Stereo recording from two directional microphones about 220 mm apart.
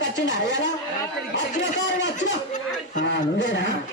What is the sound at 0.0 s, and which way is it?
A man's voice, 55° left (ahead or behind).